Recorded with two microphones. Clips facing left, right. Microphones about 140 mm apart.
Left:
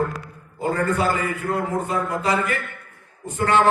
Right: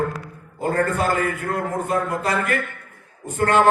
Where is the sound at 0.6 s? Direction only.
50° right (ahead or behind).